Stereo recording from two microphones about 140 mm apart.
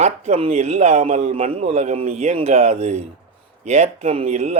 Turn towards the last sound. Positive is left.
turn(degrees=-55)  # may be behind; listen again after turning